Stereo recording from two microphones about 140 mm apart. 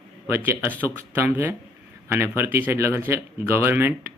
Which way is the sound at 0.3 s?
15° right (ahead or behind).